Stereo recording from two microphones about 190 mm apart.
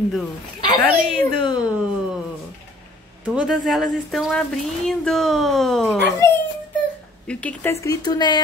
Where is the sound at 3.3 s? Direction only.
5° right (ahead or behind).